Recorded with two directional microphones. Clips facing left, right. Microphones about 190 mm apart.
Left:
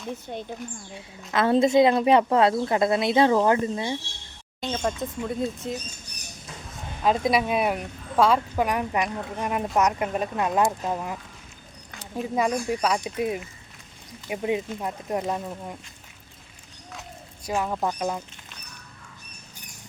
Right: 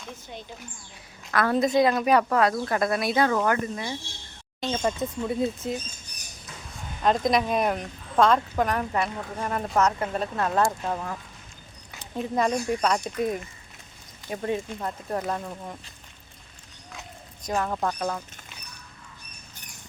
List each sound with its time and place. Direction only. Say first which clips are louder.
0.3 s speech: left 5 dB; 50° left (ahead or behind)
1.3 s speech: left 3 dB; 25° left (ahead or behind)
4.6 s speech: right 1 dB; centre (ahead or behind)
7.0 s speech: even; 5° left (ahead or behind)
11.9 s speech: even; 5° left (ahead or behind)
16.9 s a sound: left 2 dB; 5° left (ahead or behind)
17.8 s speech: left 1 dB; 15° left (ahead or behind)